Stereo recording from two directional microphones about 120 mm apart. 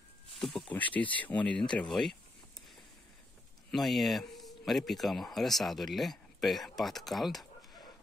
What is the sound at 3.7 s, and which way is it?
Speech, centre (ahead or behind).